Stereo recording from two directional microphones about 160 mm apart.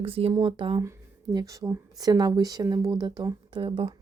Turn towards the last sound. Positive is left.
turn(degrees=-30)  # may be behind; listen again after turning